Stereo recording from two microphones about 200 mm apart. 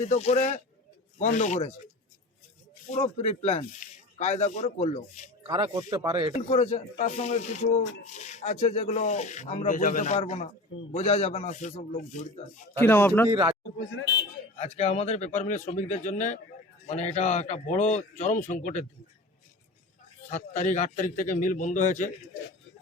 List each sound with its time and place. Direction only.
0.0 s speech: 35° left (ahead or behind)
2.9 s speech: 30° left (ahead or behind)
5.5 s speech: 20° right (ahead or behind)
6.3 s speech: 30° left (ahead or behind)
12.8 s speech: 10° left (ahead or behind)
13.3 s a man's voice: 25° right (ahead or behind)
14.5 s speech: 30° left (ahead or behind)
20.3 s speech: 35° left (ahead or behind)